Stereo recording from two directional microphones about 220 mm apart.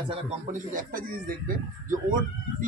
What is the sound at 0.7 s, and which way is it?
A man's voice, 40° right (ahead or behind).